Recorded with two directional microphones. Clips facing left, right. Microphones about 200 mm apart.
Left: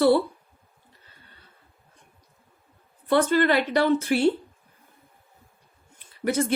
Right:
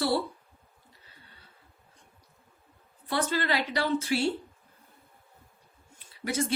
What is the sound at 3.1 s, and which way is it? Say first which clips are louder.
A woman's voice: left 9 dB; 55° left (ahead or behind).